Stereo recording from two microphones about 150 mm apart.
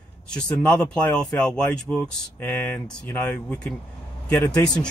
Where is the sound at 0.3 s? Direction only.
5° left (ahead or behind).